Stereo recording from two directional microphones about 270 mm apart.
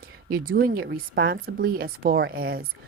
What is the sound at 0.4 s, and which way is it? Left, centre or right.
Speech, right.